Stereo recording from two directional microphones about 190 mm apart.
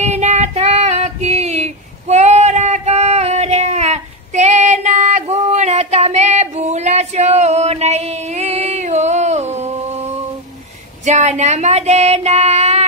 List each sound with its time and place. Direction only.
0.0 s child singing: 35° right (ahead or behind)